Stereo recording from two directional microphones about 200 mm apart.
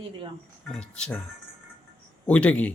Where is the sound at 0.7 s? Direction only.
5° left (ahead or behind).